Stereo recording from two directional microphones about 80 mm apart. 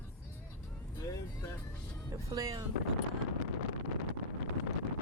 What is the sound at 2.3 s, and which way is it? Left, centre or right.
Speech, right.